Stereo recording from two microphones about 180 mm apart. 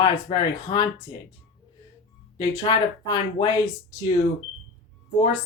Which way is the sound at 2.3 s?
25° left (ahead or behind).